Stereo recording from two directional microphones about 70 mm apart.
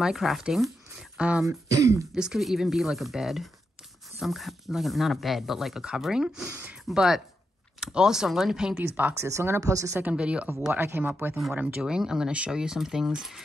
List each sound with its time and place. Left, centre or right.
0.0 s speech: centre
1.1 s speech: centre
1.5 s speech: right
2.1 s speech: centre
8.8 s speech: right
9.2 s speech: right
9.6 s speech: right
10.1 s speech: centre
10.7 s speech: right
11.8 s speech: centre